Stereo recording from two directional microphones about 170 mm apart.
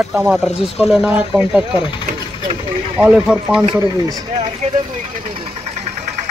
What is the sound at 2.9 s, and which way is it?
Speech, 5° right (ahead or behind).